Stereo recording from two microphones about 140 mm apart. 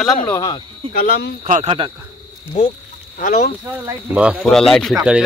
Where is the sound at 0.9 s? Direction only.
90° left.